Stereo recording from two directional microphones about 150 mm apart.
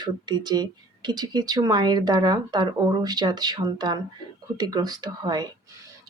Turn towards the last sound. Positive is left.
turn(degrees=-30)  # may be behind; listen again after turning